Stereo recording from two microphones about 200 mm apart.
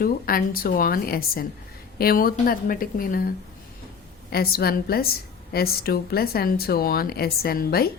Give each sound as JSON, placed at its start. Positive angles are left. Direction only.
{"t": 0.0, "sound": "speech", "side_deg": 45}
{"t": 4.3, "sound": "speech", "side_deg": 50}